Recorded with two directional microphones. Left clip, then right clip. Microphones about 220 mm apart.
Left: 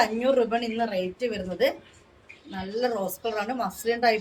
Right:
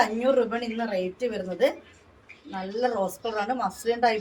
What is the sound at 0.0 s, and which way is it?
Speech, 20° left (ahead or behind).